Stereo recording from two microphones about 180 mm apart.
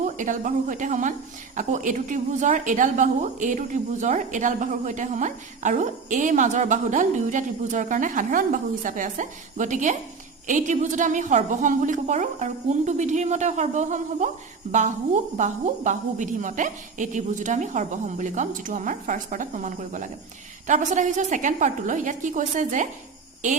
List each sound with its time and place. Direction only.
0.0 s a woman's voice: 45° right (ahead or behind)
15.4 s a woman's voice: 40° right (ahead or behind)